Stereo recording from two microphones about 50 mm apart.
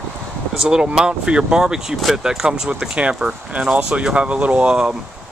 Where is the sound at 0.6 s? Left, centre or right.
Centre.